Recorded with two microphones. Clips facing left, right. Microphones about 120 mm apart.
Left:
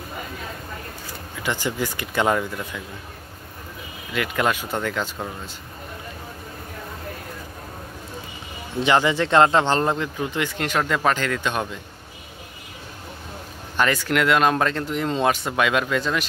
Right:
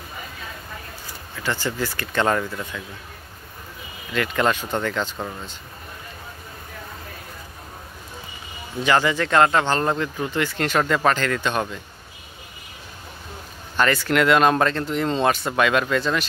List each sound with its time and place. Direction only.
1.3 s speech: 15° left (ahead or behind)
4.1 s speech: 10° left (ahead or behind)
8.7 s speech: 20° left (ahead or behind)
10.8 s speech: 5° right (ahead or behind)
11.1 s speech: 10° left (ahead or behind)
13.7 s speech: 10° left (ahead or behind)